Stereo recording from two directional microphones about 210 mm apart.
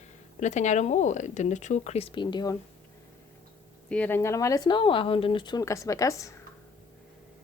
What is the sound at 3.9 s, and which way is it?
Speech, 10° left (ahead or behind).